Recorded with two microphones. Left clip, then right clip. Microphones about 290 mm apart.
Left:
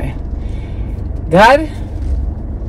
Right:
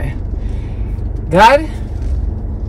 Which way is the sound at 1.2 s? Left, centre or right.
Centre.